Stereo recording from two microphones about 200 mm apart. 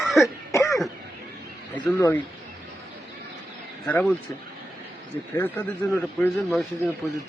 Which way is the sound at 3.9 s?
5° left (ahead or behind).